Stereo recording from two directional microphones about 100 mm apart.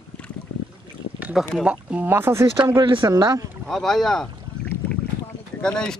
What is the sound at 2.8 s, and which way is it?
Speech, 55° right (ahead or behind).